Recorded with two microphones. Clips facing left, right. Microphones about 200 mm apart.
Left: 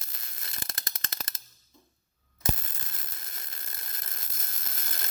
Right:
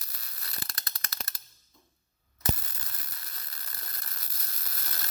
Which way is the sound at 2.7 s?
25° left (ahead or behind).